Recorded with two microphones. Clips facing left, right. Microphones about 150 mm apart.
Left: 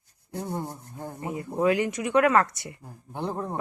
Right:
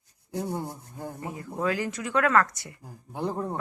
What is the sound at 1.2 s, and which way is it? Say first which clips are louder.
Speech: left 5 dB; 20° left (ahead or behind).